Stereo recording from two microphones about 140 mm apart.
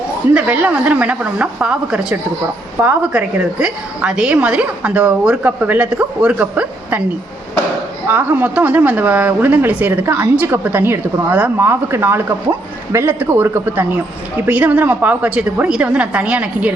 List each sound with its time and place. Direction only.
0.3 s a woman's voice: 10° right (ahead or behind)
8.0 s a woman's voice: 15° right (ahead or behind)